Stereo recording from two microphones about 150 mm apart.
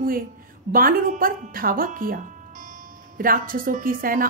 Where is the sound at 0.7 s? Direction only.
70° right (ahead or behind).